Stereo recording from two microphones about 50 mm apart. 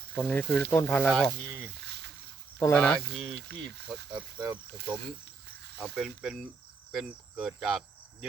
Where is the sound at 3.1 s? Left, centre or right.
Centre.